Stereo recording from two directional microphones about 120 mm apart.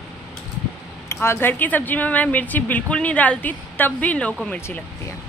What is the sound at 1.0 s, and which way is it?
Speech, 20° left (ahead or behind).